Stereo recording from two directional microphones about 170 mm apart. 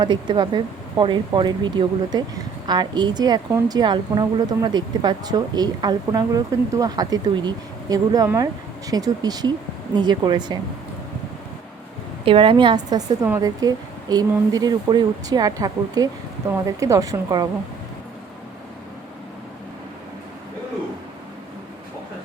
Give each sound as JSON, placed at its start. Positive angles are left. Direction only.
{"t": 0.0, "sound": "speech", "side_deg": -30}
{"t": 12.2, "sound": "speech", "side_deg": -30}